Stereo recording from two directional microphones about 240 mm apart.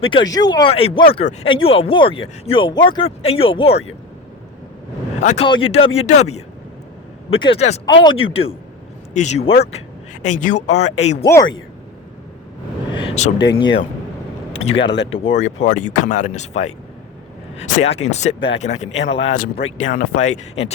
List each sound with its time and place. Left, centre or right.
0.0 s speech: centre
5.2 s speech: left
11.3 s speech: centre
12.9 s a sound: left
14.5 s speech: left